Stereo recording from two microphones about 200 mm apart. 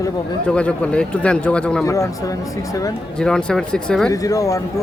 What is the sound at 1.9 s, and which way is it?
Speech, 15° left (ahead or behind).